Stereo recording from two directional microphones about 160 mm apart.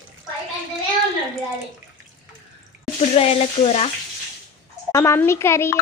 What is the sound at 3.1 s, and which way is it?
Speech, 40° left (ahead or behind).